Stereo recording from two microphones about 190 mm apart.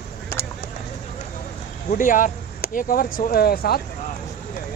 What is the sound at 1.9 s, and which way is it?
Speech, 45° left (ahead or behind).